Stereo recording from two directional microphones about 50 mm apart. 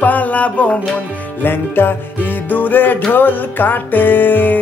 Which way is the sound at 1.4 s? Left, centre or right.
Left.